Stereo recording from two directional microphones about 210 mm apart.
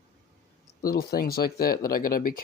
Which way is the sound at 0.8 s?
45° left (ahead or behind).